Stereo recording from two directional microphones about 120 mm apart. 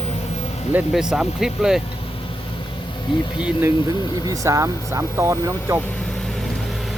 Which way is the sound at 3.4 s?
10° right (ahead or behind).